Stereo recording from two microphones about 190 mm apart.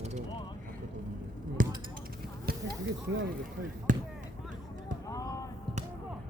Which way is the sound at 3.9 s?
40° right (ahead or behind).